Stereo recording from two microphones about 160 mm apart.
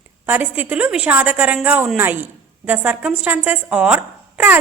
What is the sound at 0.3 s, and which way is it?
Speech, 10° right (ahead or behind).